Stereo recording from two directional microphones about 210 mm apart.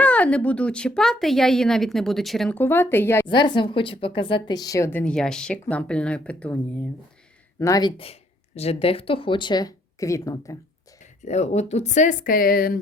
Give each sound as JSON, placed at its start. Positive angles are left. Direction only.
{"t": 0.0, "sound": "speech", "side_deg": 5}
{"t": 3.2, "sound": "a woman's voice", "side_deg": 20}
{"t": 7.6, "sound": "speech", "side_deg": 15}
{"t": 11.3, "sound": "speech", "side_deg": 30}